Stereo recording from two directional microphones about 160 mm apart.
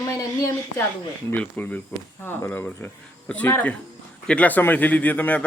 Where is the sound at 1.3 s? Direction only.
10° left (ahead or behind).